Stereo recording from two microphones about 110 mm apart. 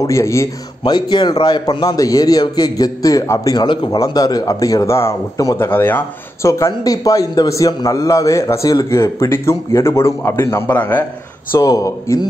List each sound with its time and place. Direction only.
0.0 s speech: 25° left (ahead or behind)
0.8 s a man's voice: 40° left (ahead or behind)
3.6 s a man's voice: 50° left (ahead or behind)
4.0 s a man's voice: 35° left (ahead or behind); by 11.1 s 20° left (ahead or behind)
11.5 s a man's voice: 30° left (ahead or behind)